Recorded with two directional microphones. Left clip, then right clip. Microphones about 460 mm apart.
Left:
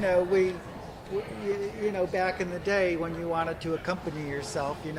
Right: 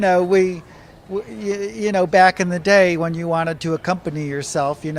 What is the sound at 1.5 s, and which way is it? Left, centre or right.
Speech, right.